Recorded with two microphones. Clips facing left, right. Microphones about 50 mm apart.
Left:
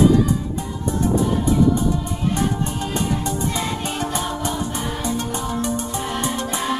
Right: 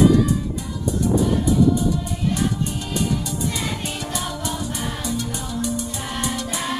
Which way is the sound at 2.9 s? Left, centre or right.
Left.